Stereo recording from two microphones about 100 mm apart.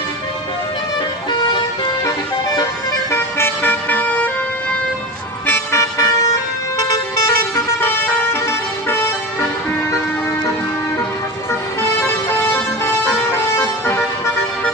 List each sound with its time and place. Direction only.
3.1 s vehicle: 25° left (ahead or behind)
5.5 s vehicle: 30° left (ahead or behind)
12.8 s music: 25° left (ahead or behind)